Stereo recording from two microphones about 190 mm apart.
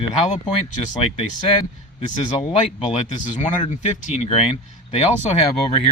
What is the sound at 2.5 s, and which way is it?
Speech, 40° left (ahead or behind).